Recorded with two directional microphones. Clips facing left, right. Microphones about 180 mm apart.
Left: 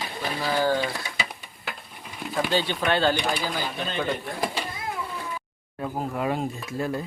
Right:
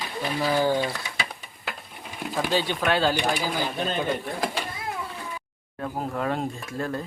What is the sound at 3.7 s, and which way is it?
Speech, 40° right (ahead or behind).